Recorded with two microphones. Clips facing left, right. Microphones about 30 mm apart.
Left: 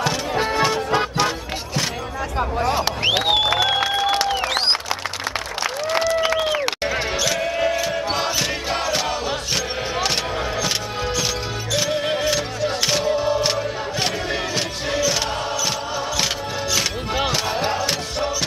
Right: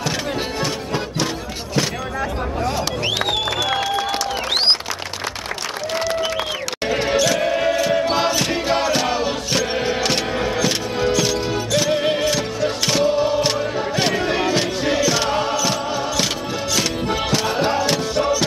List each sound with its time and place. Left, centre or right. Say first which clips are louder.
0.6 s music: left 4 dB; centre
2.6 s music: left 2 dB; left
6.9 s a sound: right 9 dB; centre
12.0 s music: right 2 dB; centre
13.0 s choir: right 5 dB; centre
14.1 s music: right 5 dB; centre
16.7 s music: right 2 dB; centre